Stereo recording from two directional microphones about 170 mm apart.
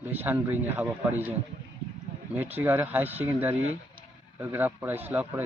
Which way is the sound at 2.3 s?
10° right (ahead or behind).